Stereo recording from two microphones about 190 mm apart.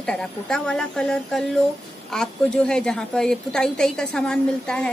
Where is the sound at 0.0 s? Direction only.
5° left (ahead or behind).